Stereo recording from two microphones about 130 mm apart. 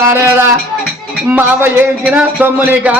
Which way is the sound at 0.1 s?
20° right (ahead or behind).